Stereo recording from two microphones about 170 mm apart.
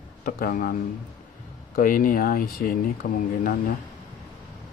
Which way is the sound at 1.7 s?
55° left (ahead or behind).